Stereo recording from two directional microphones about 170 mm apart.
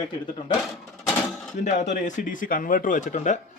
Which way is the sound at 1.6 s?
45° left (ahead or behind).